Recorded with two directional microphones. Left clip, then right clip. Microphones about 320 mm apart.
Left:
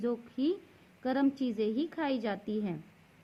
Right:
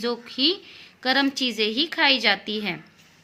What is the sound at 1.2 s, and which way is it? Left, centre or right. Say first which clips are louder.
A woman's voice: right 8 dB; centre.